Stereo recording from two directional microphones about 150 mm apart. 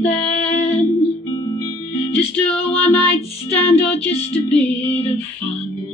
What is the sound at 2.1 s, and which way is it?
Music, 10° left (ahead or behind).